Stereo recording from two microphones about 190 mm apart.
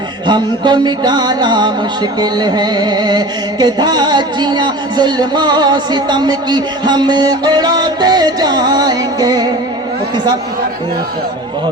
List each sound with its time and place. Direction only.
0.3 s music: 25° right (ahead or behind)